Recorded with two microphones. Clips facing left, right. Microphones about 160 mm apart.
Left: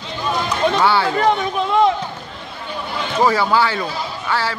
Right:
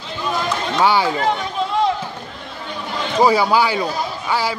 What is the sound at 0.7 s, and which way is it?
Speech, 15° right (ahead or behind).